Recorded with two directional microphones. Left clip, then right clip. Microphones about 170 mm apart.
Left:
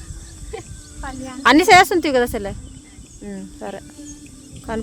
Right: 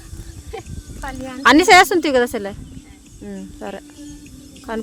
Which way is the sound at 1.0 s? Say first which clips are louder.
Right 2 dB; 85° right.